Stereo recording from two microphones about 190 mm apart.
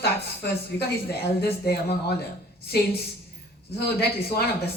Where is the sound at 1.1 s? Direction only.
55° left (ahead or behind).